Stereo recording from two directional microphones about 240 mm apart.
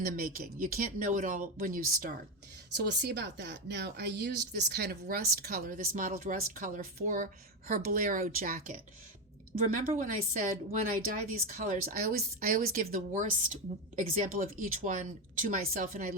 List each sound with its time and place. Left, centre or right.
0.0 s a woman's voice: right
9.9 s a woman's voice: right